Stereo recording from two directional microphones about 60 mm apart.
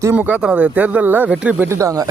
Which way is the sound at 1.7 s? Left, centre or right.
Right.